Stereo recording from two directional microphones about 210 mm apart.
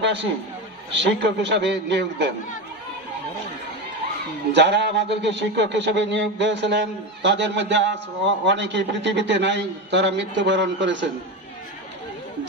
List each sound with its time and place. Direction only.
0.0 s a man's voice: 55° right (ahead or behind)
4.5 s a man's voice: 55° right (ahead or behind)